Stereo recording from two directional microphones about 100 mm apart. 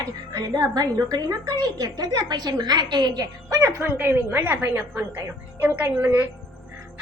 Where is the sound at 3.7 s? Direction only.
20° right (ahead or behind).